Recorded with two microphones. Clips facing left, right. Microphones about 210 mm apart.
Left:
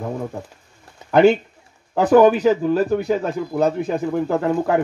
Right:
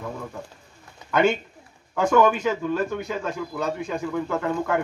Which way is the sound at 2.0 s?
35° left (ahead or behind).